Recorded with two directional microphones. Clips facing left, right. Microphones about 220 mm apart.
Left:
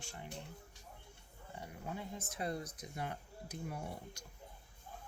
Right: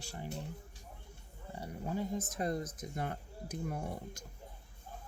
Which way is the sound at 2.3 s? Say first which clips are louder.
Right 5 dB; 45° right (ahead or behind).